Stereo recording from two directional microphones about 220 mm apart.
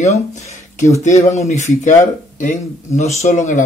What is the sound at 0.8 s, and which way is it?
Speech, 15° left (ahead or behind).